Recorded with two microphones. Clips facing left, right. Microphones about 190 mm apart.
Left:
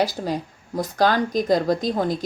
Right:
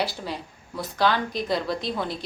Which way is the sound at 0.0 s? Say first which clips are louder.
Left 6 dB; 45° left (ahead or behind).